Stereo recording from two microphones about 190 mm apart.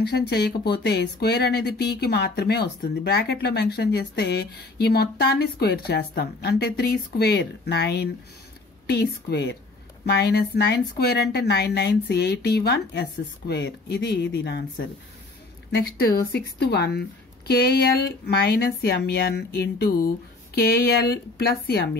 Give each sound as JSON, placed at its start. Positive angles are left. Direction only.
{"t": 0.3, "sound": "speech", "side_deg": 60}
{"t": 15.7, "sound": "speech", "side_deg": 55}